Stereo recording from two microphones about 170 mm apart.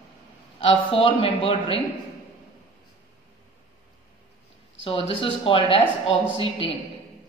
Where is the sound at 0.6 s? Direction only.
35° left (ahead or behind).